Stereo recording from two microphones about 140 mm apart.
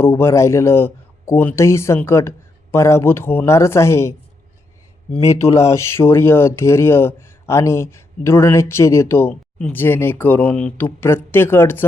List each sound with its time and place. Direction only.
0.0 s speech: 20° left (ahead or behind)
5.2 s speech: 20° left (ahead or behind)